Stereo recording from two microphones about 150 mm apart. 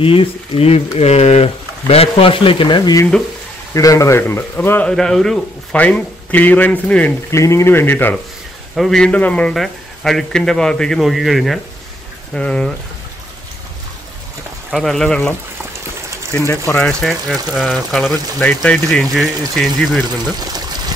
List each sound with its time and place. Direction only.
0.0 s speech: 40° left (ahead or behind); by 7.2 s 10° left (ahead or behind)
7.2 s speech: 20° left (ahead or behind)
8.7 s speech: centre (ahead or behind)
14.7 s speech: centre (ahead or behind)
16.3 s speech: 15° left (ahead or behind)
17.0 s speech: centre (ahead or behind)